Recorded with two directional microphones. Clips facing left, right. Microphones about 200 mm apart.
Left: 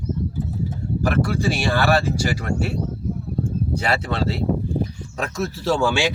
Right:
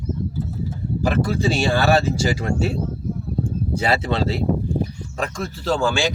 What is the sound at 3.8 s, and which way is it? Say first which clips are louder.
Speech: right 4 dB; 20° right (ahead or behind).